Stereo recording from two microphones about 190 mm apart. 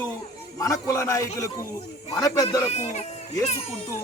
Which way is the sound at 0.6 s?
15° left (ahead or behind).